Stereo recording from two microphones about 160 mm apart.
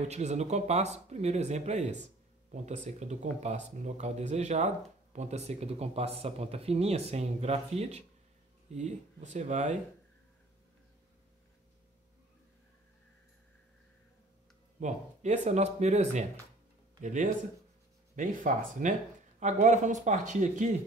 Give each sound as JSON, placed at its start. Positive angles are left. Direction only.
{"t": 0.1, "sound": "speech", "side_deg": -45}
{"t": 14.8, "sound": "speech", "side_deg": -50}